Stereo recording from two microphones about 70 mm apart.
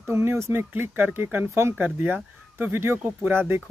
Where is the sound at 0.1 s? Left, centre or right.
Right.